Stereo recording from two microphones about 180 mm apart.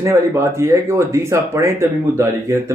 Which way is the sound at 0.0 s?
15° right (ahead or behind).